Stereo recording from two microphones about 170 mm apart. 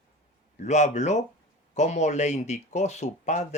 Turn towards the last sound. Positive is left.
turn(degrees=45)  # may be behind; listen again after turning